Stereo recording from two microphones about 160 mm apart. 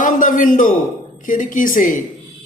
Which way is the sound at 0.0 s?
55° left (ahead or behind).